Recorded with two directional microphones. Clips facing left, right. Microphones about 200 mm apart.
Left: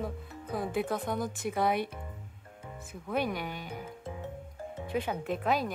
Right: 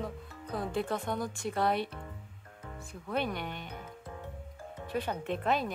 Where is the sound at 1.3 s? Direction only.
15° left (ahead or behind).